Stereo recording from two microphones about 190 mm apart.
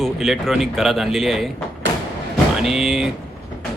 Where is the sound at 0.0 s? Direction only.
Centre (ahead or behind).